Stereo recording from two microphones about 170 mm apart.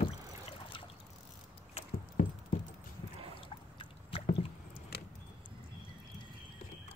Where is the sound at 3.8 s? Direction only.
35° left (ahead or behind).